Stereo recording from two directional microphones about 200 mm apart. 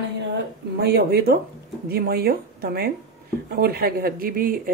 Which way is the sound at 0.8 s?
55° right (ahead or behind).